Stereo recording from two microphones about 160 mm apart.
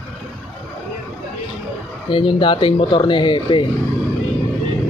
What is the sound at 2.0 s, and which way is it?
Speech, 30° left (ahead or behind).